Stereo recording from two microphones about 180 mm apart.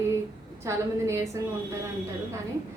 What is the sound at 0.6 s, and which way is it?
Speech, 15° right (ahead or behind).